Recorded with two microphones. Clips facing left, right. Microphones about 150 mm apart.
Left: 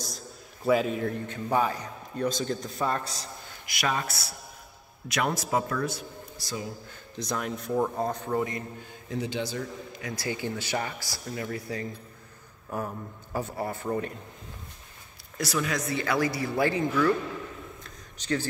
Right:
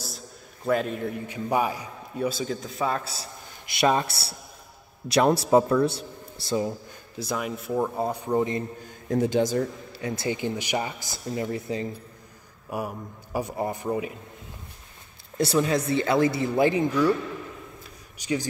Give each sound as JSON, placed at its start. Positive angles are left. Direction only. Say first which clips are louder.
{"t": 0.7, "sound": "a man's voice", "louder": "left 1 dB", "side_deg": 0}
{"t": 1.2, "sound": "a man's voice", "louder": "right 3 dB", "side_deg": -10}
{"t": 3.6, "sound": "a man's voice", "louder": "right 7 dB", "side_deg": -25}
{"t": 7.2, "sound": "a man's voice", "louder": "right 2 dB", "side_deg": -5}
{"t": 8.4, "sound": "speech", "louder": "right 7 dB", "side_deg": -25}
{"t": 9.1, "sound": "speech", "louder": "right 9 dB", "side_deg": -45}
{"t": 9.9, "sound": "speech", "louder": "right 5 dB", "side_deg": -25}
{"t": 12.6, "sound": "a man's voice", "louder": "right 2 dB", "side_deg": -10}
{"t": 15.3, "sound": "speech", "louder": "right 7 dB", "side_deg": -30}
{"t": 17.8, "sound": "a sound", "louder": "right 2 dB", "side_deg": -10}